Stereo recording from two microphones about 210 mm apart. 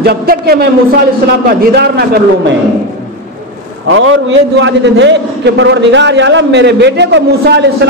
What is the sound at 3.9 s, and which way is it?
A man's voice, 60° right (ahead or behind).